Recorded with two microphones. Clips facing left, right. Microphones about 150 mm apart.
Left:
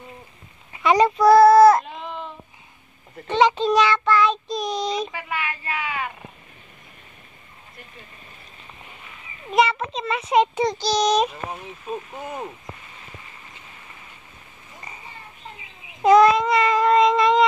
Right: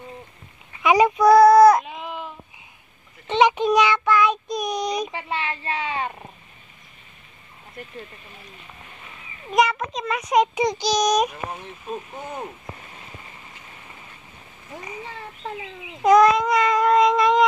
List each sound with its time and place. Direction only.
0.8 s child singing: 5° right (ahead or behind)
3.3 s child singing: 15° right (ahead or behind)
5.1 s a sound: 30° right (ahead or behind)
9.5 s a child's voice: centre (ahead or behind)
10.5 s child singing: 15° right (ahead or behind)
11.6 s speech: 5° left (ahead or behind)
15.0 s a sound: 90° right
16.0 s child singing: 5° left (ahead or behind)